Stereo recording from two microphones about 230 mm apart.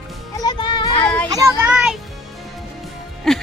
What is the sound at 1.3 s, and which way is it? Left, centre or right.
Speech, centre.